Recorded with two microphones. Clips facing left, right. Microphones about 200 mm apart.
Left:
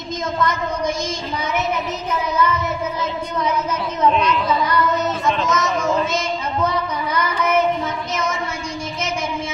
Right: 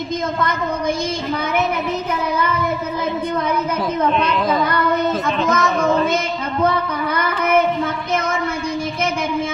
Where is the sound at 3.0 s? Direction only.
55° right (ahead or behind).